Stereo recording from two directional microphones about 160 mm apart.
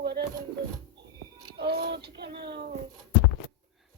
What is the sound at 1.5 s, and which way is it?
Speech, 85° right.